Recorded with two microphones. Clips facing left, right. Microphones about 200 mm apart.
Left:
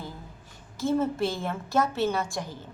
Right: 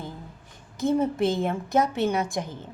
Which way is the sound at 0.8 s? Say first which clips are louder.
Right 3 dB; 15° right (ahead or behind).